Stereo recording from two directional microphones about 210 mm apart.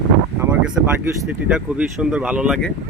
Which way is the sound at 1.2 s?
5° right (ahead or behind).